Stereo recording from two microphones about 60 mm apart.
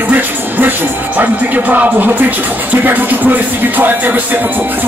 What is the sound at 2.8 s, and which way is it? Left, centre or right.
Music, right.